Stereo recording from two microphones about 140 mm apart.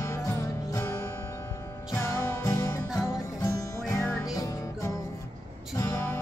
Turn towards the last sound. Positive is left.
turn(degrees=20)  # may be behind; listen again after turning